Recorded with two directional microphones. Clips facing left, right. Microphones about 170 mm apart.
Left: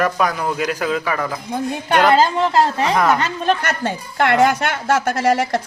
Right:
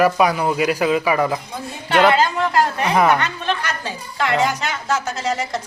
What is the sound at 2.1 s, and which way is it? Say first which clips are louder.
Speech: left 3 dB; 30° left (ahead or behind).